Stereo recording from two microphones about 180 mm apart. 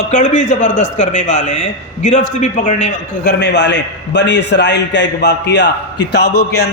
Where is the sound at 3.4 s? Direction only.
70° left (ahead or behind).